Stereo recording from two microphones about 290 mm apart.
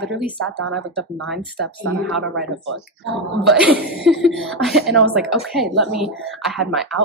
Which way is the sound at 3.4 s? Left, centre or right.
Centre.